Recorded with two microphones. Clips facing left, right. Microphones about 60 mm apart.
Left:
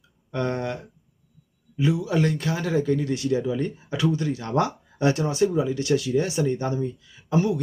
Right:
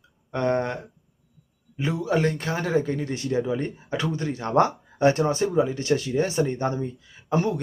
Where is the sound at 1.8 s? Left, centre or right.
Right.